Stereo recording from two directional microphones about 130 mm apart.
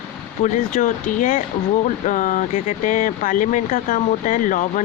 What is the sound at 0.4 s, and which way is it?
Speech, 75° left (ahead or behind).